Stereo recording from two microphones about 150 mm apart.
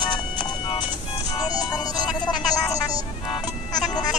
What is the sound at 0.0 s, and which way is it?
Music, 30° left (ahead or behind).